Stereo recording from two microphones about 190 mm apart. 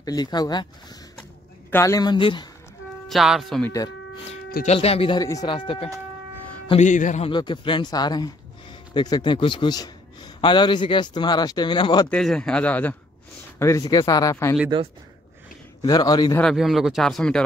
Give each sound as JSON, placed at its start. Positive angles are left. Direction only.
{"t": 0.0, "sound": "a man's voice", "side_deg": 20}
{"t": 1.7, "sound": "a man's voice", "side_deg": 15}
{"t": 3.1, "sound": "speech", "side_deg": 0}
{"t": 4.6, "sound": "speech", "side_deg": 30}
{"t": 5.2, "sound": "a man's voice", "side_deg": 20}
{"t": 6.7, "sound": "speech", "side_deg": 40}
{"t": 7.2, "sound": "a man's voice", "side_deg": 25}
{"t": 12.1, "sound": "a man's voice", "side_deg": 5}
{"t": 15.8, "sound": "a man's voice", "side_deg": 20}
{"t": 16.3, "sound": "speech", "side_deg": 0}